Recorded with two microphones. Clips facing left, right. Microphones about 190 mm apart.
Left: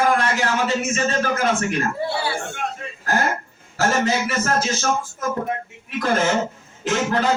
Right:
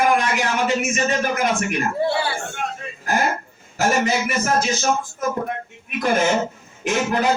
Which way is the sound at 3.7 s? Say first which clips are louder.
Even; 15° right (ahead or behind).